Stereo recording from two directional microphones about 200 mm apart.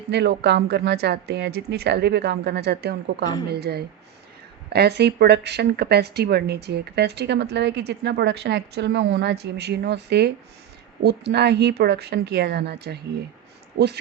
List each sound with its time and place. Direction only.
0.1 s speech: 55° right (ahead or behind)